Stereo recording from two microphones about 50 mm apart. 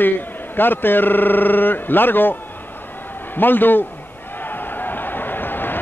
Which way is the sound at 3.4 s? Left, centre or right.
Left.